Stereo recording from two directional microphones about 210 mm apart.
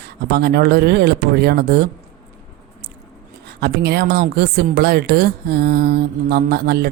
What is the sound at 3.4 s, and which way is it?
A woman's voice, 50° right (ahead or behind).